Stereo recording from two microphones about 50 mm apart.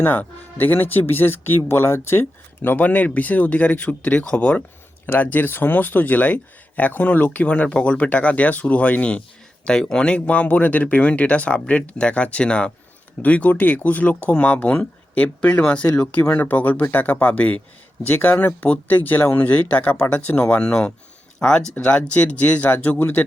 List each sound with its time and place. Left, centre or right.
0.0 s speech: left
5.0 s speech: left
16.2 s speech: left
22.7 s speech: left